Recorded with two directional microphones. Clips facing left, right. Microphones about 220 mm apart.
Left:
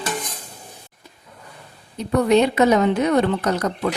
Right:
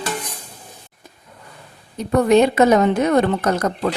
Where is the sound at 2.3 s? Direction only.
50° right (ahead or behind).